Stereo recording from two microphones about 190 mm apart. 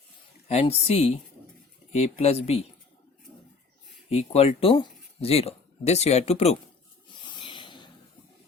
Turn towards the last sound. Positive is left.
turn(degrees=25)  # may be behind; listen again after turning